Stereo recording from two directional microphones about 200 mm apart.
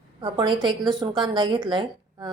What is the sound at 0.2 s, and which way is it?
A woman's voice, 25° right (ahead or behind).